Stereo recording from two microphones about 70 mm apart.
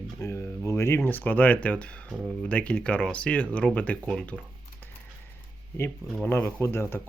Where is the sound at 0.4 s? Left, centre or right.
Left.